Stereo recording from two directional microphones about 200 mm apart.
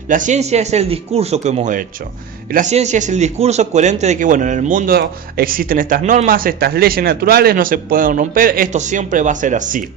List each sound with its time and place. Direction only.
0.1 s a man's voice: 40° right (ahead or behind)